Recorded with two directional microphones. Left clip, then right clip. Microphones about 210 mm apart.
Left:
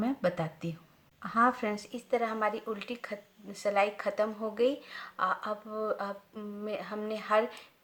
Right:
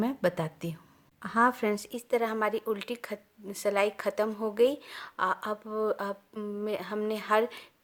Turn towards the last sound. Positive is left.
turn(degrees=-45)  # may be behind; listen again after turning